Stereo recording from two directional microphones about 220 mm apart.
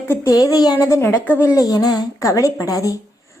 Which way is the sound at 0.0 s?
15° left (ahead or behind).